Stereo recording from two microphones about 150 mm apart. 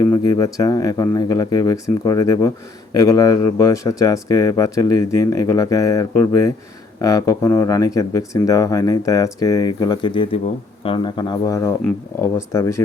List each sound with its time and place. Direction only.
0.0 s speech: 25° left (ahead or behind)